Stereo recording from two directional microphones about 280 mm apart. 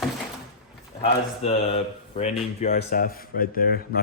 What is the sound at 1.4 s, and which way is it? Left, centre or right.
Speech, left.